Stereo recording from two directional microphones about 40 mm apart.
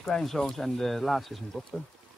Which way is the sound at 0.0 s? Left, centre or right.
Centre.